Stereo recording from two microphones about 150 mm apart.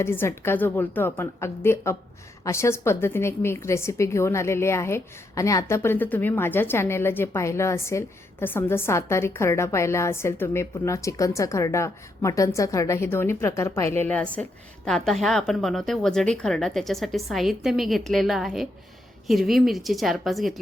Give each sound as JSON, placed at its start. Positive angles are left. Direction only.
{"t": 0.0, "sound": "a woman's voice", "side_deg": 15}